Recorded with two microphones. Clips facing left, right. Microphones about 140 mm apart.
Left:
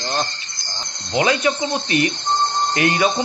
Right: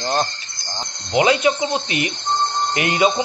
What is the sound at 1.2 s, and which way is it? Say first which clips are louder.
Speech: right 2 dB; 20° right (ahead or behind).